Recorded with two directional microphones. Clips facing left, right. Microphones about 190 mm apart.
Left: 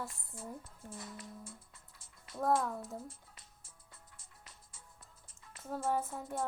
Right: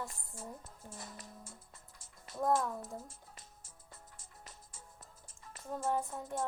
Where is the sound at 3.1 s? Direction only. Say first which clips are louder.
Right 4 dB; 45° right (ahead or behind).